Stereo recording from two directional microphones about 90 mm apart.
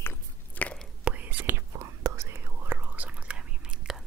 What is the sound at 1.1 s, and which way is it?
Whispering, 10° right (ahead or behind).